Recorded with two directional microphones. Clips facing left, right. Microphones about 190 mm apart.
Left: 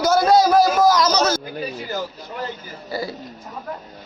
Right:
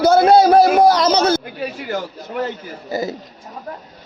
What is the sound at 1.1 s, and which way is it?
Speech, 55° right (ahead or behind).